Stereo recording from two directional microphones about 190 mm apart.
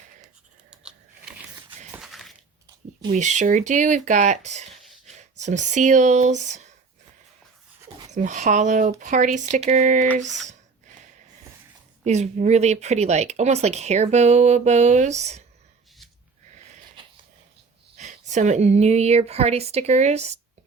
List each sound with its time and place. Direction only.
0.7 s scissors: 5° right (ahead or behind)
1.9 s crushing: centre (ahead or behind)
3.1 s speech: 40° right (ahead or behind)
4.7 s a sound: centre (ahead or behind)
5.0 s speech: 35° right (ahead or behind)
8.1 s speech: 40° right (ahead or behind)
12.0 s speech: 35° right (ahead or behind)
17.9 s speech: 40° right (ahead or behind)